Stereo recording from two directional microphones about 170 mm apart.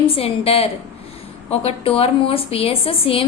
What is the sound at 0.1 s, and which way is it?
A woman's voice, 35° left (ahead or behind).